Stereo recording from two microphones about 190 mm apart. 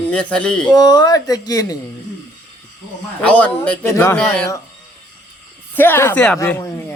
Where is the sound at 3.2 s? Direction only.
5° left (ahead or behind).